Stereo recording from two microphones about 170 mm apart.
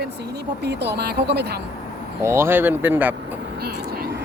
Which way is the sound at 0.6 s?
75° right (ahead or behind).